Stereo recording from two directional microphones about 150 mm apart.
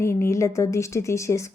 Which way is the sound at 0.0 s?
20° left (ahead or behind).